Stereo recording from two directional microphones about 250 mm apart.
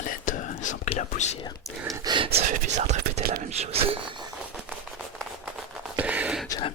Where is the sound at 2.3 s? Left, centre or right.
Right.